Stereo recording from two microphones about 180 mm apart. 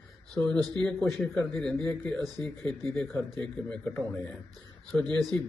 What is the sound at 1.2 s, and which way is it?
Speech, 10° left (ahead or behind).